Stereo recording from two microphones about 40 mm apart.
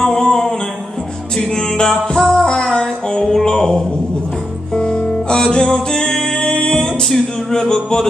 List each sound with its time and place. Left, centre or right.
0.0 s mantra: centre
1.5 s music: centre